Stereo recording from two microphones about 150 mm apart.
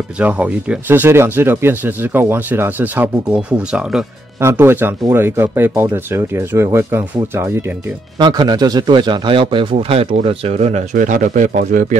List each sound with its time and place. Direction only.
0.2 s speech: 10° right (ahead or behind)
8.2 s a man's voice: 30° right (ahead or behind); by 12.0 s 55° right (ahead or behind)